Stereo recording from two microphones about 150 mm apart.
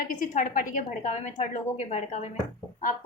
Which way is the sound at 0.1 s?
60° left (ahead or behind).